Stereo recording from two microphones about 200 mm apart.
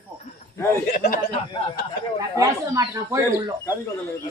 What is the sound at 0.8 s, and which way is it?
Speech, 50° left (ahead or behind).